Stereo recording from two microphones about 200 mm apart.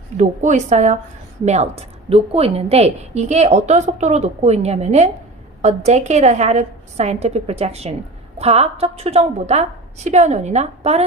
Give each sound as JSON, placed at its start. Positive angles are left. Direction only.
{"t": 0.2, "sound": "a woman's voice", "side_deg": -35}